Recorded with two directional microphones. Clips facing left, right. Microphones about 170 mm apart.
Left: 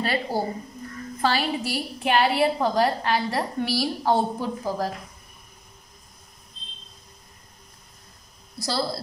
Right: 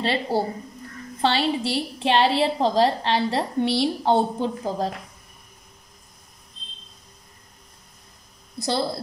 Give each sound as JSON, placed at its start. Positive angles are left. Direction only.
{"t": 0.0, "sound": "a woman's voice", "side_deg": -25}
{"t": 8.6, "sound": "a woman's voice", "side_deg": -20}